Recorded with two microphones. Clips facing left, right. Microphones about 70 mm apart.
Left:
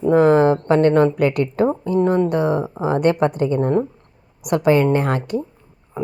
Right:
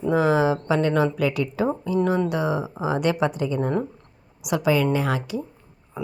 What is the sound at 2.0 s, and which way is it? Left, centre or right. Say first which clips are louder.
Speech: left 6 dB; left.